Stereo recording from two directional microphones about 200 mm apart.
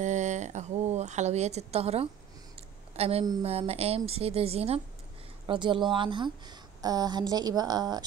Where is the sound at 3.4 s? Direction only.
30° right (ahead or behind).